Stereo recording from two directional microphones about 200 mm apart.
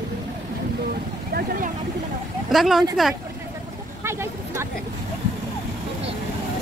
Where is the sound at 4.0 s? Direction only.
15° right (ahead or behind).